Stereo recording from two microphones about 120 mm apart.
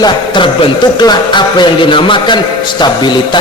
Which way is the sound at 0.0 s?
45° left (ahead or behind).